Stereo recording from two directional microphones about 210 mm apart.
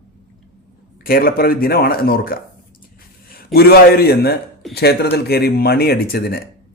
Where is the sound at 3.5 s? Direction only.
45° left (ahead or behind).